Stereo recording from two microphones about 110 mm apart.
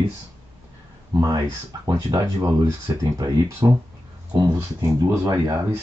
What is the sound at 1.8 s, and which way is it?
Speech, 35° right (ahead or behind).